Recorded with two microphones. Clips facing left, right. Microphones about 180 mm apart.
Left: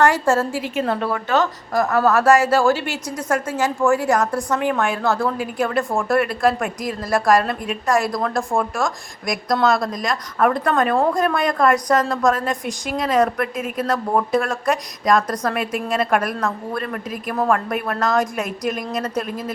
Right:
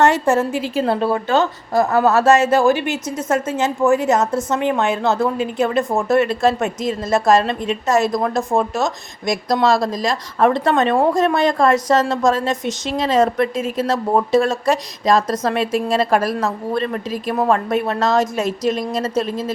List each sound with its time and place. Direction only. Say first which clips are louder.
0.0 s a woman's voice: right 2 dB; 20° right (ahead or behind)
0.6 s a woman's voice: right 3 dB; 30° right (ahead or behind)